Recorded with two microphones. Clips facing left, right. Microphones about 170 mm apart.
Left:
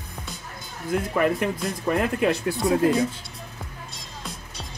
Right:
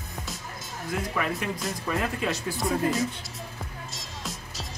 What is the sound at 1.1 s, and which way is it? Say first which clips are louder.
Speech: left 9 dB; 55° left (ahead or behind).